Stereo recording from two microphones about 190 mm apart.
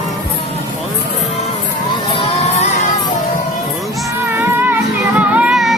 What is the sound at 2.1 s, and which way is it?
Crowd, 30° left (ahead or behind).